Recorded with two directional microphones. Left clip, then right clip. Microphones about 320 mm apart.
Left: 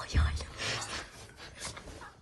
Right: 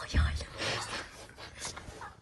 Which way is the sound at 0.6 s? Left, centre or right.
Centre.